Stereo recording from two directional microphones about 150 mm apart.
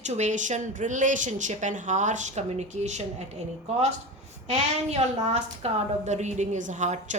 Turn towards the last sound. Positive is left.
turn(degrees=-55)  # may be behind; listen again after turning